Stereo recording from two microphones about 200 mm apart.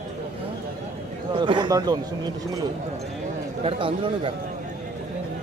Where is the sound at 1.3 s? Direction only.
25° right (ahead or behind).